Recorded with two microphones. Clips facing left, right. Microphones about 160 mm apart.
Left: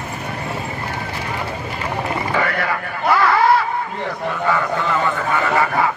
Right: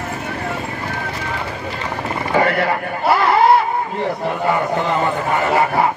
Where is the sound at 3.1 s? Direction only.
25° right (ahead or behind).